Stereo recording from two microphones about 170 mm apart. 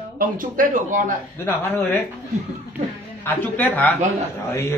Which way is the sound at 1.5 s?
10° left (ahead or behind).